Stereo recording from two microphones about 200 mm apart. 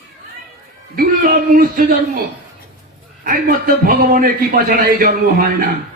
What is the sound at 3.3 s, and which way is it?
A man's voice, 45° right (ahead or behind).